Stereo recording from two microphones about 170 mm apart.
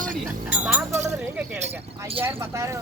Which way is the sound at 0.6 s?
5° right (ahead or behind).